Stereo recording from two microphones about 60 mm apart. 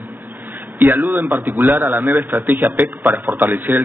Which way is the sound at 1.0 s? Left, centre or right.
Right.